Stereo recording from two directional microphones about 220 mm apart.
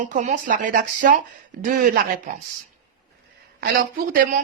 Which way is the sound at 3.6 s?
40° right (ahead or behind).